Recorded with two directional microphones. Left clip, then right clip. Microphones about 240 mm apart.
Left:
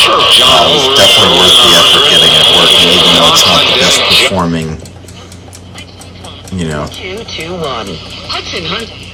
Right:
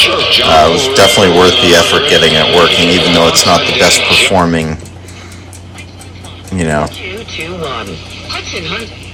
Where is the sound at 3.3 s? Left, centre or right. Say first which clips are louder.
Left 2 dB; left.